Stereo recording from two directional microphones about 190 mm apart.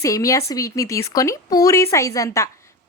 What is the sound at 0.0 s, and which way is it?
Speech, 15° left (ahead or behind).